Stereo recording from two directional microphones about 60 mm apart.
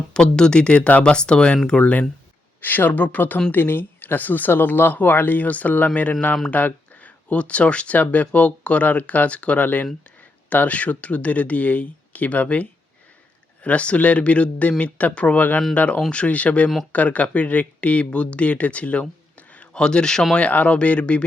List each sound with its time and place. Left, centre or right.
0.1 s speech: centre
1.8 s speech: left; by 20.2 s centre
20.3 s speech: left